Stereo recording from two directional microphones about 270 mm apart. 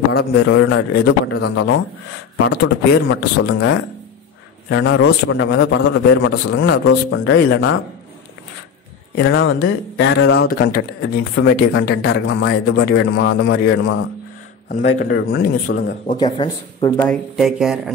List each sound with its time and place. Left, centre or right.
0.1 s speech: left
0.4 s speech: left
9.1 s speech: left
14.7 s speech: left
15.1 s speech: left
16.2 s speech: centre
16.9 s speech: centre